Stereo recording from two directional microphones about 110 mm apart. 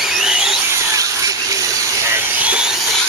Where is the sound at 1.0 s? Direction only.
30° right (ahead or behind).